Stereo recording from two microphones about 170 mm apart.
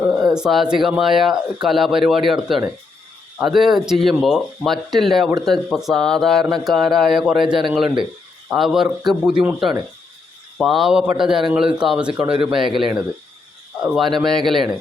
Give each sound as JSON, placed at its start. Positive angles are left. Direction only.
{"t": 0.0, "sound": "speech", "side_deg": -10}
{"t": 12.3, "sound": "a man's voice", "side_deg": -30}
{"t": 12.5, "sound": "speech", "side_deg": 0}